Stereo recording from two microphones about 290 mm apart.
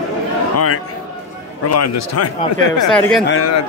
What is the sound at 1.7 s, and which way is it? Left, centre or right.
Speech, left.